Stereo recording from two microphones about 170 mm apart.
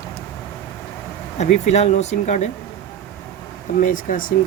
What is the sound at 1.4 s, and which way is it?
Speech, 40° left (ahead or behind).